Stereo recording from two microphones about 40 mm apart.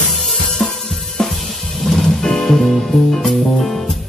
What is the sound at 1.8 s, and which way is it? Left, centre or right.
Music, centre.